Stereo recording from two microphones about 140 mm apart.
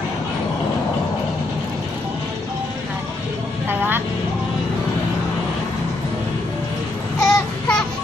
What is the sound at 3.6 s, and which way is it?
Vehicle, 15° right (ahead or behind).